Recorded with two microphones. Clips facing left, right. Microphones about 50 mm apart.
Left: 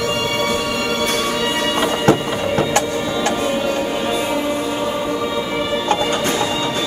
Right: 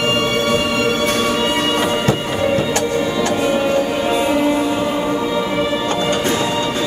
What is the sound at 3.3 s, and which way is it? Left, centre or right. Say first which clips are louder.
Music: right 3 dB; right.